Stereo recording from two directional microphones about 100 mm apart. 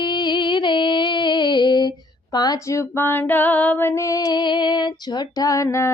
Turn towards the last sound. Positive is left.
turn(degrees=30)  # may be behind; listen again after turning